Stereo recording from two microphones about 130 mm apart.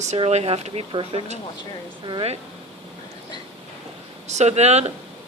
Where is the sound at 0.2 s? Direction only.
50° right (ahead or behind).